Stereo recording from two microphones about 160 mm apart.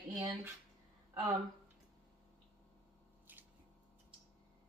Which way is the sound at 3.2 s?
10° right (ahead or behind).